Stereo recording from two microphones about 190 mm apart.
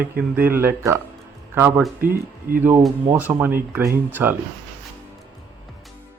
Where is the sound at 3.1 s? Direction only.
10° right (ahead or behind).